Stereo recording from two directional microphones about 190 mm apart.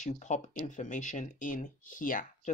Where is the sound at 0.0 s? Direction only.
40° left (ahead or behind).